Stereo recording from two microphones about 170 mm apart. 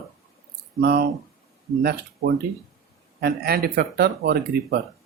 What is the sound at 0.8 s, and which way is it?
Speech, 65° right (ahead or behind).